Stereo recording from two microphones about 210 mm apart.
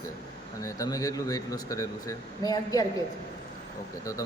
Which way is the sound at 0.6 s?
15° left (ahead or behind).